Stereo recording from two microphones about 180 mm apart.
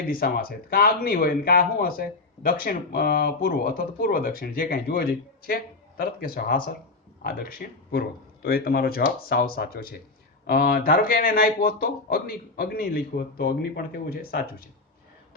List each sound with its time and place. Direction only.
0.1 s speech: 55° left (ahead or behind)